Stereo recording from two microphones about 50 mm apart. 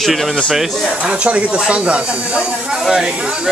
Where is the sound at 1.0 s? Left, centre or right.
Right.